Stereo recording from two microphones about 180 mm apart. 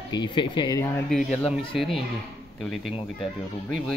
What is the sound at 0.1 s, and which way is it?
Speech, 25° left (ahead or behind).